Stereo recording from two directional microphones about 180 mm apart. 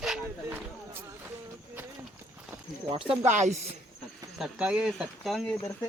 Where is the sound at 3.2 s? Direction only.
40° right (ahead or behind).